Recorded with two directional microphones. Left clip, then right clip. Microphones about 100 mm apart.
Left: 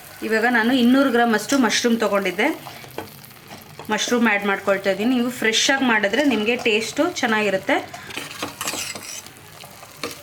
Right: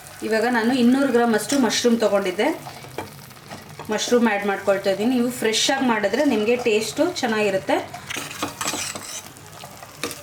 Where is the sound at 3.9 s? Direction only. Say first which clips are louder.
Even; 45° left (ahead or behind).